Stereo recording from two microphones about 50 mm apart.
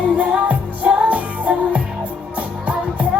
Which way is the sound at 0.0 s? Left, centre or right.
Right.